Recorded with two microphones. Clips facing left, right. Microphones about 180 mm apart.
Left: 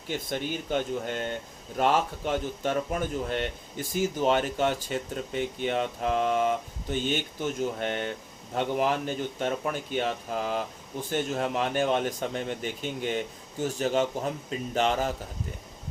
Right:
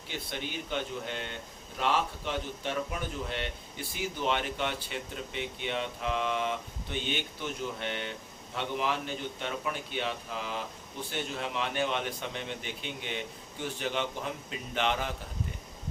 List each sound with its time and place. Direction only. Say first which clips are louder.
0.1 s a man's voice: left 7 dB; 45° left (ahead or behind)